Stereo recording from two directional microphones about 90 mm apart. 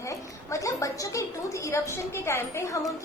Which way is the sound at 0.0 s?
35° left (ahead or behind).